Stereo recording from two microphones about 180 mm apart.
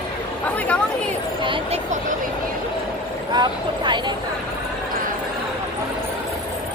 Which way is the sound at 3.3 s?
25° right (ahead or behind).